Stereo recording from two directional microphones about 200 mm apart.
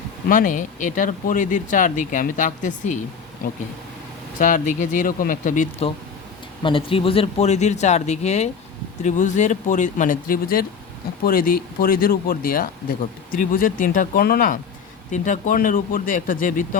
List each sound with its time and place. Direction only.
0.3 s speech: 40° left (ahead or behind)
6.6 s speech: 25° left (ahead or behind); by 16.6 s 40° left (ahead or behind)